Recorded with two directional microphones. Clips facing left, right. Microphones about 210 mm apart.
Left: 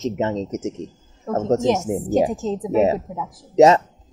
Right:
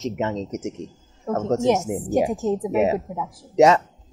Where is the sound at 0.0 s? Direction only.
25° left (ahead or behind).